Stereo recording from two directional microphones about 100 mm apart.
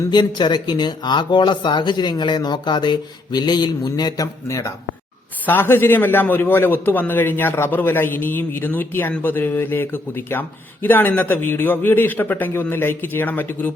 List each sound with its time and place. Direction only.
0.1 s speech: 45° left (ahead or behind)
4.4 s a man's voice: 30° left (ahead or behind)